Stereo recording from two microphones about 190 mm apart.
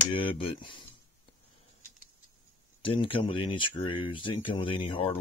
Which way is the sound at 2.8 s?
25° left (ahead or behind).